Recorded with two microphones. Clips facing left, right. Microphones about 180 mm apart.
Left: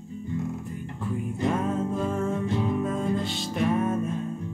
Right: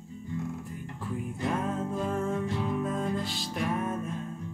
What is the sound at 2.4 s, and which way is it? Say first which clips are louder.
Music: left 5 dB; 20° left (ahead or behind).